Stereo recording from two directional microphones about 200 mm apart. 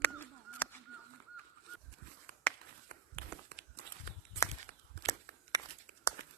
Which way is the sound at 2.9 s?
40° right (ahead or behind).